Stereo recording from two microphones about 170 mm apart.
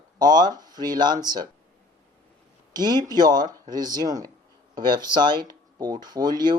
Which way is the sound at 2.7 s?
25° right (ahead or behind).